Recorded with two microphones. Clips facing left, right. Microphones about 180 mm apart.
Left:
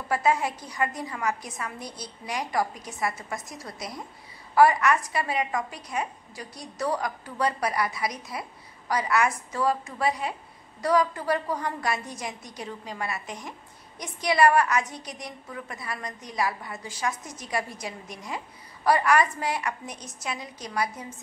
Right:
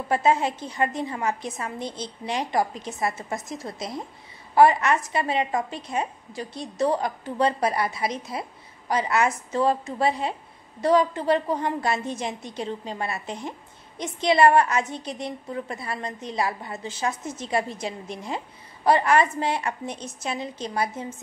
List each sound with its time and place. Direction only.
0.1 s a woman's voice: 25° right (ahead or behind)